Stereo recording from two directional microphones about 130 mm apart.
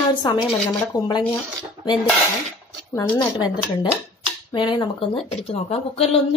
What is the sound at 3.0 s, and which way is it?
A woman's voice, 35° left (ahead or behind).